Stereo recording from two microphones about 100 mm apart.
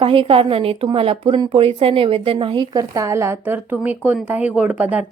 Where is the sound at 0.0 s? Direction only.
60° right (ahead or behind).